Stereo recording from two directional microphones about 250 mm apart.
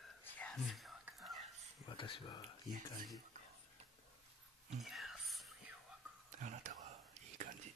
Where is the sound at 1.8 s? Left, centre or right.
Centre.